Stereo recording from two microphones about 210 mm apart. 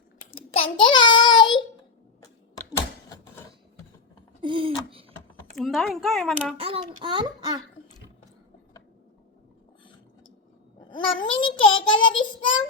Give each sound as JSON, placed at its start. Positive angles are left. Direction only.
{"t": 0.8, "sound": "child singing", "side_deg": 20}
{"t": 4.4, "sound": "a sound", "side_deg": -25}
{"t": 5.5, "sound": "speech", "side_deg": 0}
{"t": 6.6, "sound": "a child's voice", "side_deg": -25}
{"t": 10.8, "sound": "a child's voice", "side_deg": 20}